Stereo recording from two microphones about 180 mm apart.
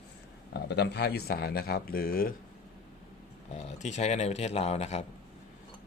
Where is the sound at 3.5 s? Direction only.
40° left (ahead or behind).